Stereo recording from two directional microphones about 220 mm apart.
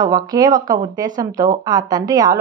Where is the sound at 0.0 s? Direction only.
15° right (ahead or behind).